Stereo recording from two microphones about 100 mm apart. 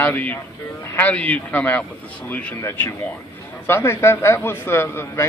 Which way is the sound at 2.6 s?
25° left (ahead or behind).